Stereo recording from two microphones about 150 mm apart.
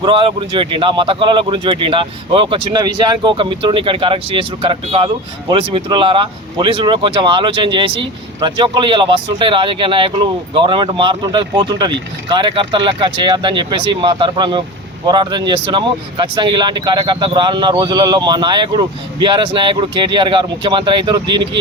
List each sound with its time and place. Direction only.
0.0 s speech: 35° right (ahead or behind)